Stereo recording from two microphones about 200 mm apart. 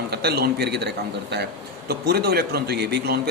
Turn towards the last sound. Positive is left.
turn(degrees=-55)  # may be behind; listen again after turning